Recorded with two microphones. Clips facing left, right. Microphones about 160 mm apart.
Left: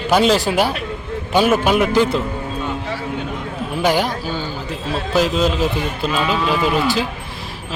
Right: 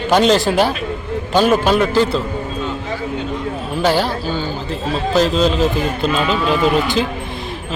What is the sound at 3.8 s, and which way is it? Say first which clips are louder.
Speech: right 1 dB; 15° left (ahead or behind).